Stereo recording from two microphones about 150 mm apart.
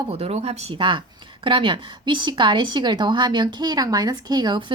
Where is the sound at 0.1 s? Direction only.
45° right (ahead or behind).